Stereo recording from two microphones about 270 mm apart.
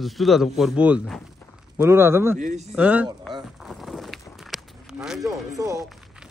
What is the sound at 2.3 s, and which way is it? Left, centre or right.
Speech, right.